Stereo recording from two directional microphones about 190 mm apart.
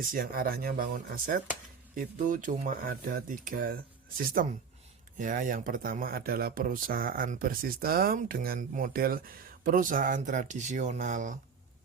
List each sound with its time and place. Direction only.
0.0 s speech: 50° right (ahead or behind)